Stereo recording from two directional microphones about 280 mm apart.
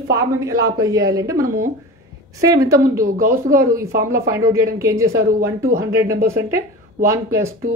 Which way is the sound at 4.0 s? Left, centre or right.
Centre.